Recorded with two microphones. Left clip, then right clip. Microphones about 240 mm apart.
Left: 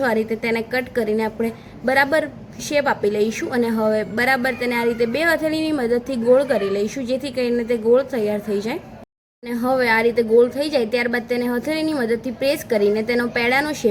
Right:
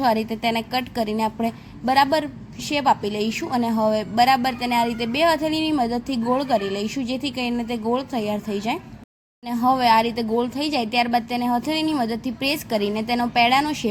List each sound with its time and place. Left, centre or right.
0.0 s a woman's voice: centre